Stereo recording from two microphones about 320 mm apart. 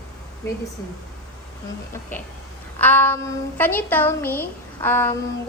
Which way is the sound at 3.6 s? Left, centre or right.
Centre.